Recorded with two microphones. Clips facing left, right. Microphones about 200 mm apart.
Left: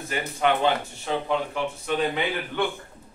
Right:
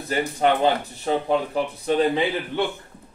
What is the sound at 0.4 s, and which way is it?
A man's voice, 35° right (ahead or behind).